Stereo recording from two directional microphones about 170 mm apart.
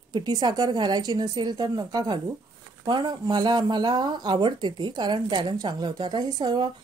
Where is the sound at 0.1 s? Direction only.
25° right (ahead or behind).